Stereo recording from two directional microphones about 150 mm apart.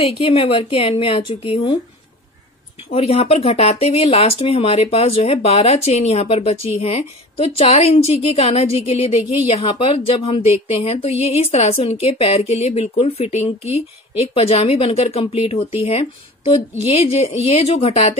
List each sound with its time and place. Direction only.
0.0 s speech: 35° left (ahead or behind)
2.9 s speech: 40° left (ahead or behind)